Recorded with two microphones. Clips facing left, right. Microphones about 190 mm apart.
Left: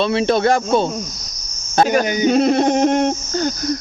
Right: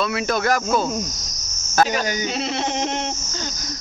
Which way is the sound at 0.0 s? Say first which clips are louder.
Left 6 dB; 30° left (ahead or behind).